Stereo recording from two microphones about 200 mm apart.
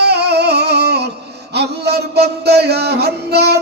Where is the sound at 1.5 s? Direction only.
55° right (ahead or behind).